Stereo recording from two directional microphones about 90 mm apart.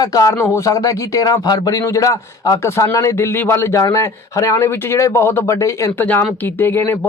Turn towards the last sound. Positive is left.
turn(degrees=25)  # may be behind; listen again after turning